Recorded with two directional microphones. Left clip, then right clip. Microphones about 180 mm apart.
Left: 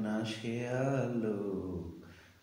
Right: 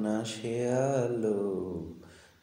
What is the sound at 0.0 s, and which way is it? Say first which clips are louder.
Speech: right 4 dB; 40° right (ahead or behind).